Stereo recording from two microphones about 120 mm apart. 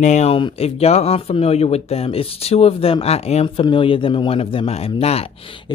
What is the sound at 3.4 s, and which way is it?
Speech, 45° left (ahead or behind).